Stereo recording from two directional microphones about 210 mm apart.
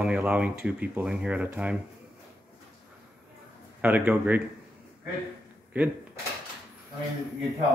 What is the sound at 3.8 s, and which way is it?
Speech, 5° right (ahead or behind).